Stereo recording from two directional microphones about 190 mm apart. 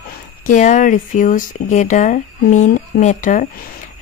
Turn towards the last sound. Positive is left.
turn(degrees=45)  # may be behind; listen again after turning